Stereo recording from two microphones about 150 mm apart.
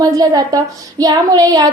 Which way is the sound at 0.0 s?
25° right (ahead or behind).